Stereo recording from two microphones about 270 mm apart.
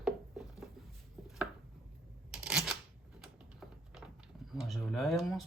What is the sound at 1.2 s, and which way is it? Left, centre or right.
Chopping, centre.